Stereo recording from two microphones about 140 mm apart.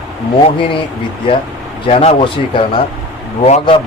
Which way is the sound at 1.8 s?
45° left (ahead or behind).